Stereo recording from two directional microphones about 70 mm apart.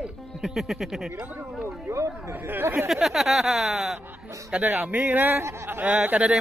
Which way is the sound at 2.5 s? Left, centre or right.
Right.